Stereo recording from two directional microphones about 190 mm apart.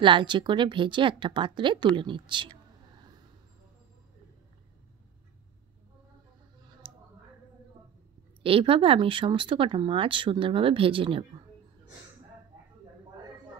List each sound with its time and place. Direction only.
0.0 s speech: 25° right (ahead or behind)
6.8 s a sound: 30° right (ahead or behind)
8.4 s speech: 30° right (ahead or behind)